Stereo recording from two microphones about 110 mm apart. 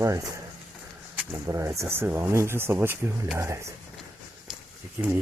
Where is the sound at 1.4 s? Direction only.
25° right (ahead or behind).